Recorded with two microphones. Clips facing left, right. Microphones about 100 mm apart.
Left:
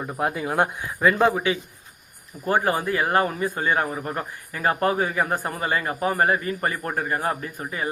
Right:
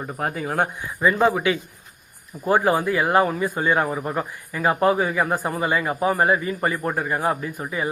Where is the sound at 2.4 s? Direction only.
20° right (ahead or behind).